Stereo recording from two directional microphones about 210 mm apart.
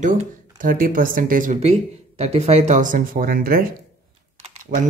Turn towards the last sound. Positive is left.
turn(degrees=-40)  # may be behind; listen again after turning